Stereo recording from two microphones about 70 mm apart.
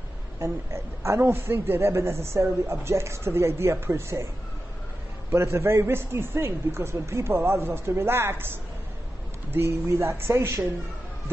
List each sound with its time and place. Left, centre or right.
0.4 s a man's voice: right
5.3 s a man's voice: right